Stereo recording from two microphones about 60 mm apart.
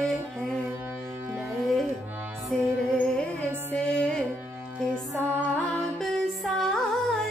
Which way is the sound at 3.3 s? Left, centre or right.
Centre.